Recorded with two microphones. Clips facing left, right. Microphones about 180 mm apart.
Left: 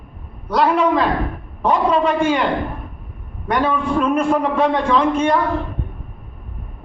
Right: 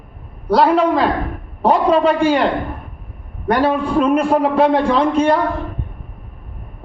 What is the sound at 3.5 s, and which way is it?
A man's voice, 35° right (ahead or behind).